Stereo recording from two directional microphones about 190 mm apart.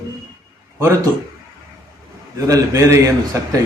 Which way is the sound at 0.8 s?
15° right (ahead or behind).